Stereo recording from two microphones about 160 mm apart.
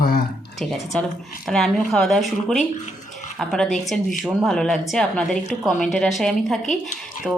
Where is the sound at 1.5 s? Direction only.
Centre (ahead or behind).